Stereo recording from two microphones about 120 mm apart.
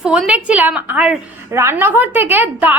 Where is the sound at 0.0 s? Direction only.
5° right (ahead or behind).